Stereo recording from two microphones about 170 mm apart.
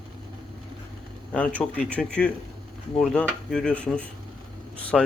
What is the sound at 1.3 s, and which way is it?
Speech, 5° left (ahead or behind).